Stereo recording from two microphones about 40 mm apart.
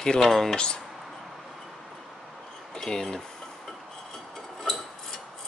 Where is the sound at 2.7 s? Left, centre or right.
Centre.